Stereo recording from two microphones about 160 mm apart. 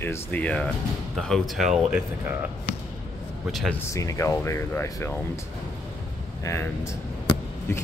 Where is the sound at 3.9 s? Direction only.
20° left (ahead or behind).